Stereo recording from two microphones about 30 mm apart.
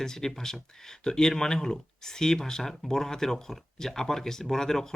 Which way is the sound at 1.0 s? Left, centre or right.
Left.